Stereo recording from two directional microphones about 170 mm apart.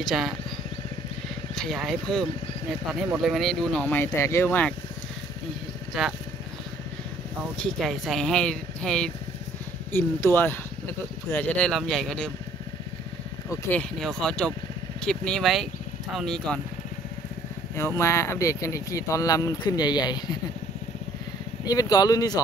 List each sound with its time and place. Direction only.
0.0 s speech: centre (ahead or behind)
1.5 s speech: centre (ahead or behind)
7.5 s speech: 5° left (ahead or behind)
13.5 s speech: 10° left (ahead or behind)
17.7 s speech: 15° left (ahead or behind)
21.6 s speech: 20° left (ahead or behind)